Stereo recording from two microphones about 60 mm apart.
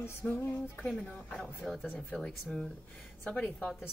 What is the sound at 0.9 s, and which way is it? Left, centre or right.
Speech, centre.